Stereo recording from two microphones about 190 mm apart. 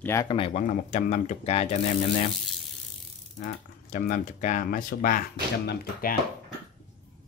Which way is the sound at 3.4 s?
40° left (ahead or behind).